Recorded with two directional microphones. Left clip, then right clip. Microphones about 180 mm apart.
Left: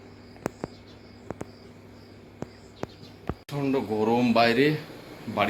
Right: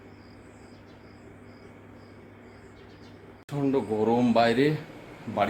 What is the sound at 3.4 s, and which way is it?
Speech, 10° right (ahead or behind).